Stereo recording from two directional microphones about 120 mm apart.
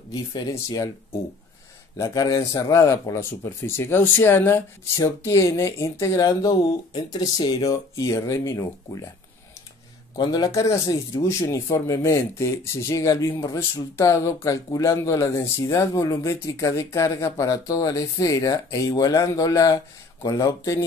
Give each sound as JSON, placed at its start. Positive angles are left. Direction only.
{"t": 0.1, "sound": "speech", "side_deg": 35}
{"t": 10.1, "sound": "speech", "side_deg": 35}